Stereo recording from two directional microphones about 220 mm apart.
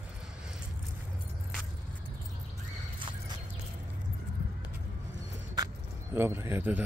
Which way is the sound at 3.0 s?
20° right (ahead or behind).